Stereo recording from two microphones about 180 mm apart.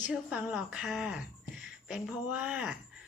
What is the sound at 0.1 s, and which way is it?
A woman's voice, 5° right (ahead or behind).